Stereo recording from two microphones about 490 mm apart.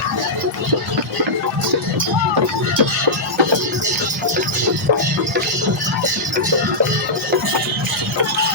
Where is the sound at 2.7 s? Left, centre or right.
Right.